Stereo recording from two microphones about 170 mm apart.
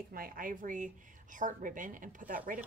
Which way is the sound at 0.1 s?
55° right (ahead or behind).